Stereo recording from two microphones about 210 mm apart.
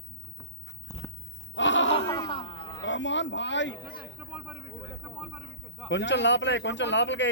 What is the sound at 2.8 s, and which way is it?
Speech, 60° left (ahead or behind).